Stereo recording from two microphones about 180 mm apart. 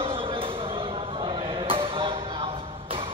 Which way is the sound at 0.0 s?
30° right (ahead or behind).